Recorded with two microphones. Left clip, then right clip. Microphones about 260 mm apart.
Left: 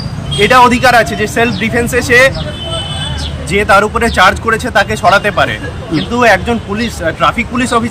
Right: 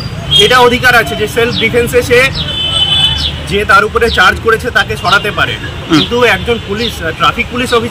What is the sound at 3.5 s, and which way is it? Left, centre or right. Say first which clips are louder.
A man's voice: even; centre.